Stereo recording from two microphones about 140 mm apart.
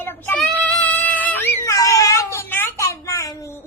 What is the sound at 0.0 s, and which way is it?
Child singing, 15° left (ahead or behind).